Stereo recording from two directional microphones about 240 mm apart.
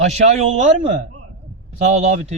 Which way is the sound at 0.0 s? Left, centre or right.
Right.